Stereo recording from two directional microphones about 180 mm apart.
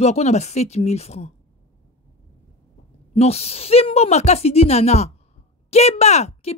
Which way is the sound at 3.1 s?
35° left (ahead or behind).